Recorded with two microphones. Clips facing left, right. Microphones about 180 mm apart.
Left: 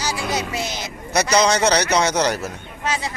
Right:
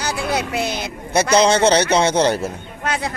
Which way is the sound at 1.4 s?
30° right (ahead or behind).